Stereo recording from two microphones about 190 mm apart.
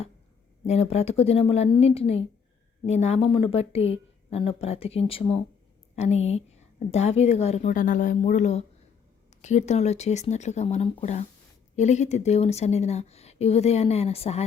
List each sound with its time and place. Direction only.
0.7 s speech: 35° left (ahead or behind)